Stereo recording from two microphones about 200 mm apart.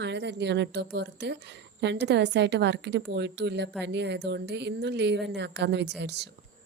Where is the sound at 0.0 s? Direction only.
60° right (ahead or behind).